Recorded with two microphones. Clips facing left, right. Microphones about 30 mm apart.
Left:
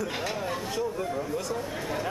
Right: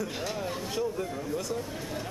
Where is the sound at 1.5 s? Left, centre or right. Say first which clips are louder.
Left 3 dB; left.